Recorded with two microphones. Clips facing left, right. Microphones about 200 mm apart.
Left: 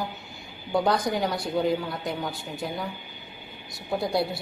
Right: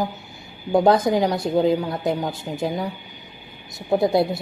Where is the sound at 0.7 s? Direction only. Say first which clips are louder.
Right 7 dB; 20° right (ahead or behind).